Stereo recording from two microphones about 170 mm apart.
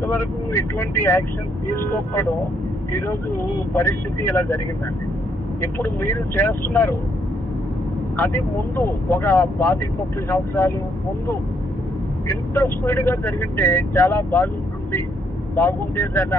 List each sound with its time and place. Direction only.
0.0 s speech: 15° left (ahead or behind)
5.6 s speech: 15° left (ahead or behind)
8.2 s speech: 10° left (ahead or behind)
12.3 s speech: 15° left (ahead or behind)